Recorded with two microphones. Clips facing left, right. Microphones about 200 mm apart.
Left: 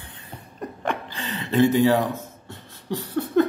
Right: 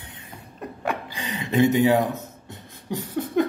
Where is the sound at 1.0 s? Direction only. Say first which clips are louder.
Even; 15° right (ahead or behind).